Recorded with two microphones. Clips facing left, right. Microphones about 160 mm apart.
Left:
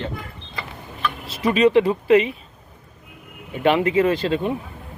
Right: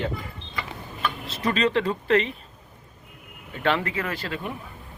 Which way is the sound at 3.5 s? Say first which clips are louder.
Left 7 dB; 15° left (ahead or behind).